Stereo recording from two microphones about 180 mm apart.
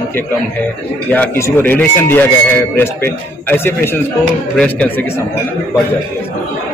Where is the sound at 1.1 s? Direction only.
10° left (ahead or behind).